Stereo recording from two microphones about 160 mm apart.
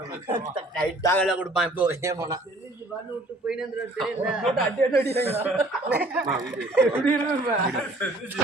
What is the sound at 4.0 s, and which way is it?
Speech, centre (ahead or behind).